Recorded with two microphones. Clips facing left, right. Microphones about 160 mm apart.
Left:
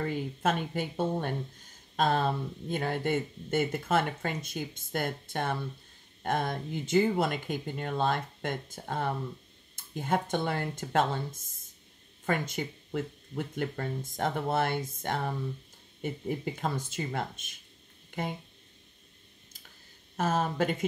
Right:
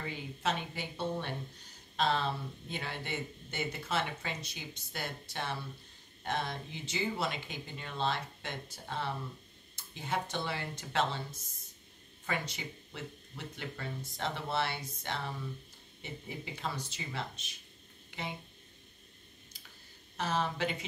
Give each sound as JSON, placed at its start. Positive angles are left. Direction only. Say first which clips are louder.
{"t": 0.0, "sound": "speech", "louder": "left 7 dB", "side_deg": 50}
{"t": 20.2, "sound": "speech", "louder": "left 5 dB", "side_deg": 45}